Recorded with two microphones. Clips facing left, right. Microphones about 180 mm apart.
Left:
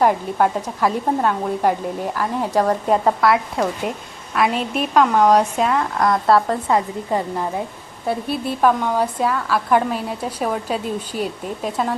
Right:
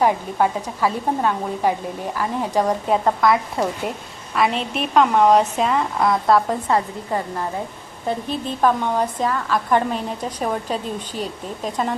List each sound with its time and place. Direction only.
0.0 s a woman's voice: 5° right (ahead or behind)
2.5 s a woman's voice: 10° right (ahead or behind)
3.0 s speech: 5° left (ahead or behind)
6.7 s a woman's voice: 15° left (ahead or behind)